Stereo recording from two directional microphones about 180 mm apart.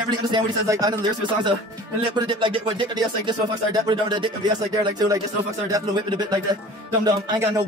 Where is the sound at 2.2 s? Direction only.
25° right (ahead or behind).